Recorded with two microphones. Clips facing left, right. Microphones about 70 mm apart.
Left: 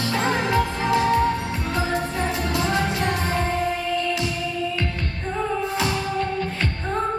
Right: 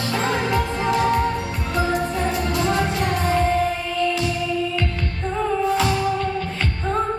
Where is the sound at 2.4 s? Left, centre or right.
Right.